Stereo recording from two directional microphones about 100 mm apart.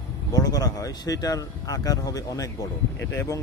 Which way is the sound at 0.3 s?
40° left (ahead or behind).